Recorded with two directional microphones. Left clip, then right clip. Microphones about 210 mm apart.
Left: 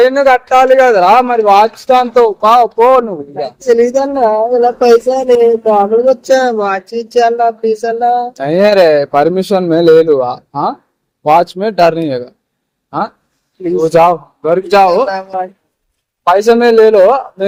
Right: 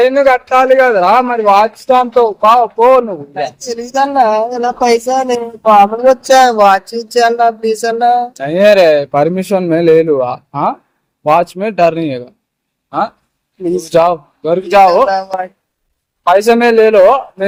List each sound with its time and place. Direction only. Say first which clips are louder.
0.0 s speech: left 1 dB; 15° left (ahead or behind)
3.6 s speech: left 7 dB; 45° right (ahead or behind)
5.6 s speech: right 3 dB; 65° right (ahead or behind)
6.1 s speech: right 3 dB; 50° right (ahead or behind)
8.4 s speech: even; 10° left (ahead or behind)
13.8 s speech: left 3 dB; 10° left (ahead or behind)
14.8 s a man's voice: right 2 dB; 5° right (ahead or behind)
16.4 s a man's voice: left 3 dB; 20° right (ahead or behind)